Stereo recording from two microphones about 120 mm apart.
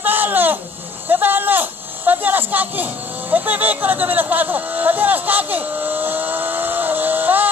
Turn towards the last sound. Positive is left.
turn(degrees=-15)  # may be behind; listen again after turning